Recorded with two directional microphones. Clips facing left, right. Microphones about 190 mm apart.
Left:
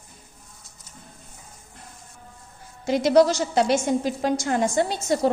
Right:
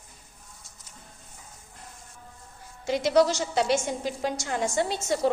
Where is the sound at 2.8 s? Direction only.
40° left (ahead or behind).